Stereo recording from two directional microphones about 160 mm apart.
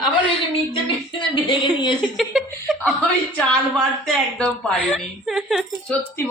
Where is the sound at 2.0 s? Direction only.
Centre (ahead or behind).